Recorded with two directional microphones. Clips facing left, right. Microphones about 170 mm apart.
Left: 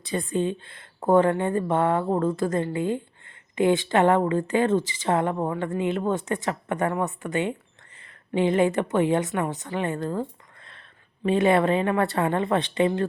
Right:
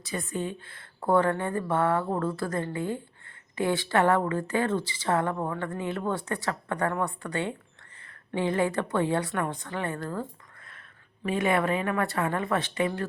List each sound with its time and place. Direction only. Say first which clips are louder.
0.0 s a woman's voice: left 6 dB; 20° left (ahead or behind)